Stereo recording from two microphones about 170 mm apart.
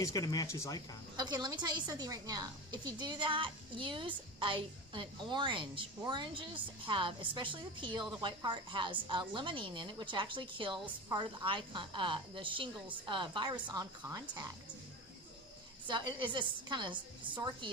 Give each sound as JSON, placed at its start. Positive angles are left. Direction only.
{"t": 0.0, "sound": "speech", "side_deg": 20}
{"t": 1.1, "sound": "a woman's voice", "side_deg": -25}
{"t": 15.9, "sound": "a woman's voice", "side_deg": -25}